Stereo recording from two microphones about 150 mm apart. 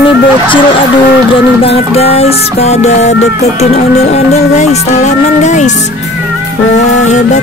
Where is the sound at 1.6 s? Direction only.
45° left (ahead or behind).